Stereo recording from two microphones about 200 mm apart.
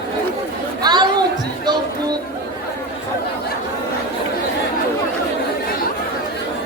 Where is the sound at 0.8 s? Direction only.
20° right (ahead or behind).